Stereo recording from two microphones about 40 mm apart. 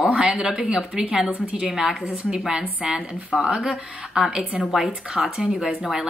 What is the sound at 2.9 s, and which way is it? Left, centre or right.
Speech, centre.